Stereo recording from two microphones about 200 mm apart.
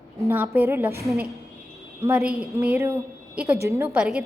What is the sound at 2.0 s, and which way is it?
Speech, 5° right (ahead or behind).